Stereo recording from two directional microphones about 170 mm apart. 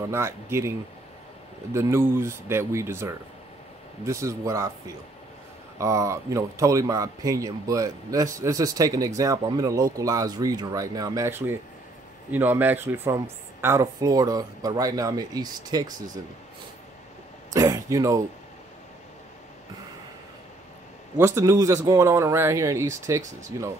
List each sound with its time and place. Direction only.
0.1 s speech: 15° right (ahead or behind)
17.5 s speech: 20° right (ahead or behind)
21.2 s speech: 15° right (ahead or behind)